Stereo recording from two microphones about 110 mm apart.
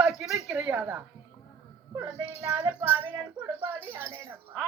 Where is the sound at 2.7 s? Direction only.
15° right (ahead or behind).